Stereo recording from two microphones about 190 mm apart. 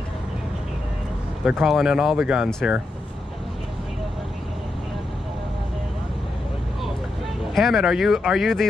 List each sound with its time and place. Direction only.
1.4 s speech: centre (ahead or behind)
7.5 s speech: centre (ahead or behind)